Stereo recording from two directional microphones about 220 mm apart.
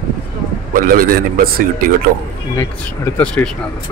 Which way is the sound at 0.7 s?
40° right (ahead or behind).